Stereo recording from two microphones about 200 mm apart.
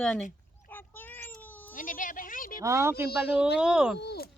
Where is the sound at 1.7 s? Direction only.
45° left (ahead or behind).